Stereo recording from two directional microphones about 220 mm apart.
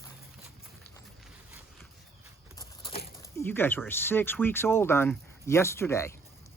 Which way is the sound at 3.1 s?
15° left (ahead or behind).